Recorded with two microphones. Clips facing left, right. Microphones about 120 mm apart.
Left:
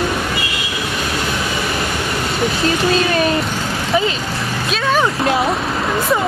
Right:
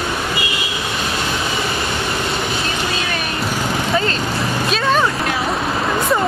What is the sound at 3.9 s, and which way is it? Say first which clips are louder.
Vehicle: left 4 dB; centre (ahead or behind).